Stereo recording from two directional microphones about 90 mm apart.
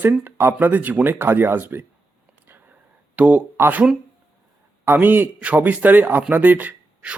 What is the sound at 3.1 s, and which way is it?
Speech, 15° right (ahead or behind).